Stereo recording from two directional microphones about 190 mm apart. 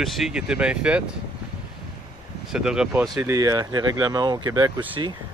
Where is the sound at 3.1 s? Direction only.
15° right (ahead or behind).